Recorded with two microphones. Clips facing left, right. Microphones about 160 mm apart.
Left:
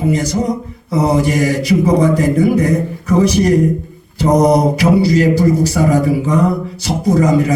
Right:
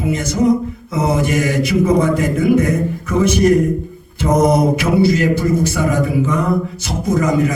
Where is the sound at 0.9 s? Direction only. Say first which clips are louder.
Left 3 dB; 35° left (ahead or behind).